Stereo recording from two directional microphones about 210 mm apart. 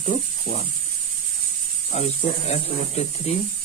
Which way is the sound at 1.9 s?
30° left (ahead or behind).